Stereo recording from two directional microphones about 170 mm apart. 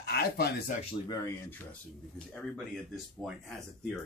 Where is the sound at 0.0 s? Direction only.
65° left (ahead or behind).